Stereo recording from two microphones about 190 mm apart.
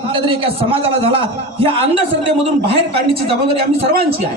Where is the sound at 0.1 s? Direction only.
30° right (ahead or behind).